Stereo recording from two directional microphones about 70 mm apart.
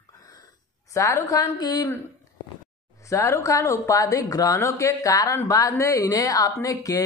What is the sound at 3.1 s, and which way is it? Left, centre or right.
A woman's voice, left.